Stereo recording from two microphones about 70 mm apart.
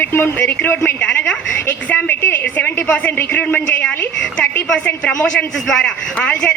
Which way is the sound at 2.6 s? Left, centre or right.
Centre.